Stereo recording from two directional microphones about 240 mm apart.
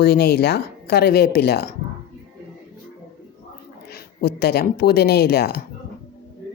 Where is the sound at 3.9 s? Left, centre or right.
Left.